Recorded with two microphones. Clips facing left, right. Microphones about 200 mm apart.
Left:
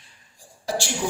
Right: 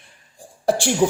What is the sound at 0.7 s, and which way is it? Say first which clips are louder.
Speech: right 7 dB; 55° right (ahead or behind).